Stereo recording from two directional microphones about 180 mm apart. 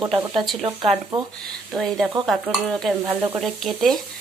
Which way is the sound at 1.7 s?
Centre (ahead or behind).